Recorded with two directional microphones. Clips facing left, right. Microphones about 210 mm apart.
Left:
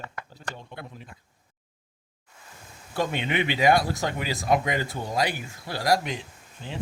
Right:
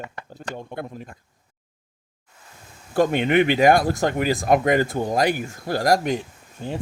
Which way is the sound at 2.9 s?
50° right (ahead or behind).